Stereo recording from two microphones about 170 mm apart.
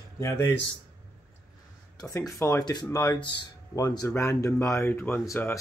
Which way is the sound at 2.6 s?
20° left (ahead or behind).